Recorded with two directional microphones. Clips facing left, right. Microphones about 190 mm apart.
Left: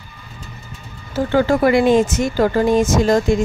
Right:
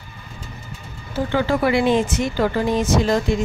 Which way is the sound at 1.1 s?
45° left (ahead or behind).